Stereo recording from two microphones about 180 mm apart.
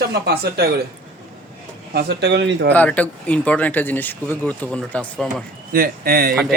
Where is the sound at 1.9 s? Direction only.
65° right (ahead or behind).